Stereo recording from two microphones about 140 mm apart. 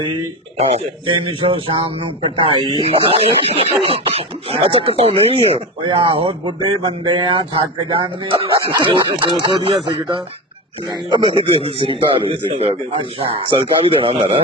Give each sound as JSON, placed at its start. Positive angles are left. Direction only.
{"t": 0.0, "sound": "speech", "side_deg": -40}
{"t": 11.1, "sound": "a man's voice", "side_deg": -45}